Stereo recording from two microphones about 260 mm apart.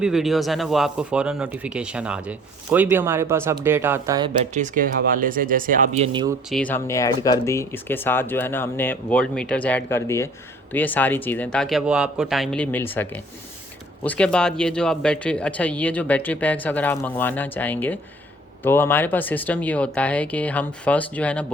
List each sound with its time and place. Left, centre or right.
0.0 s speech: centre
4.5 s speech: right
6.5 s speech: centre